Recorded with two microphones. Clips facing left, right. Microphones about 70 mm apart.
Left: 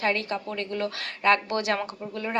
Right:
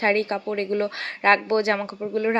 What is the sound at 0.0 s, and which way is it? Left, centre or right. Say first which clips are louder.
Speech: right 5 dB; right.